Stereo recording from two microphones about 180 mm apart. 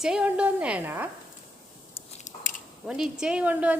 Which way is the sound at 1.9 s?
40° left (ahead or behind).